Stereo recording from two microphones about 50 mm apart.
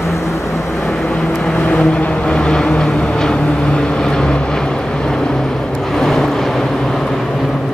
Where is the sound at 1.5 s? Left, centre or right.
Left.